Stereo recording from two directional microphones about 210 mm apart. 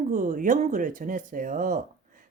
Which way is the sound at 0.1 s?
35° right (ahead or behind).